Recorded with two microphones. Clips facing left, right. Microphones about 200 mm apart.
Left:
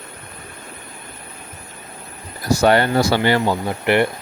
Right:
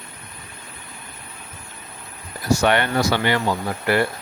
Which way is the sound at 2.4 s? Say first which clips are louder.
Left 3 dB; 35° left (ahead or behind).